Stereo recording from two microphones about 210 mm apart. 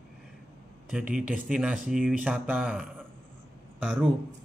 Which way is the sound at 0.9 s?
5° right (ahead or behind).